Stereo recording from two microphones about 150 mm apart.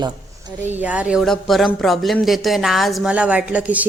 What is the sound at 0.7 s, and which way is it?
Speech, 10° right (ahead or behind).